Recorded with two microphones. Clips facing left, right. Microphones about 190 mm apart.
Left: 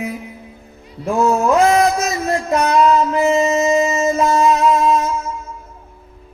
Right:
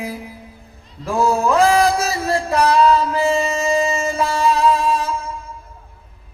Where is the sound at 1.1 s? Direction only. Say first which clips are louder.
Left 2 dB; 30° right (ahead or behind).